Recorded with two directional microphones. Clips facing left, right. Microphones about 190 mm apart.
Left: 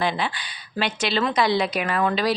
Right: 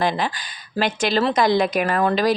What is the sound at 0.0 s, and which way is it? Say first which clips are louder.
A woman's voice: right 3 dB; 45° right (ahead or behind).